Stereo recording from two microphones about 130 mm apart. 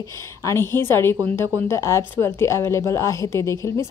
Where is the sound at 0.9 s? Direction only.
20° left (ahead or behind).